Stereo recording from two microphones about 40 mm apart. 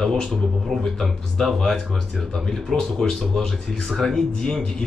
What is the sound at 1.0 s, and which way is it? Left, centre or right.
A man's voice, centre.